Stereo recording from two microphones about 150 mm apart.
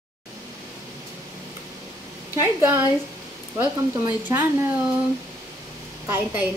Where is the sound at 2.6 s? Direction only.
20° right (ahead or behind).